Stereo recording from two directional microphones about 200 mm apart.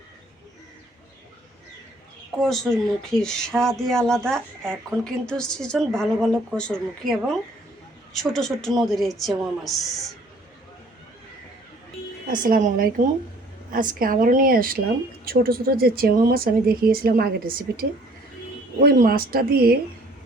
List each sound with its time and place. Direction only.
2.4 s speech: centre (ahead or behind)
12.3 s speech: 40° right (ahead or behind)